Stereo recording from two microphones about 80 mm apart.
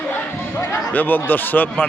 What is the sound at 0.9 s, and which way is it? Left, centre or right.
Speech, left.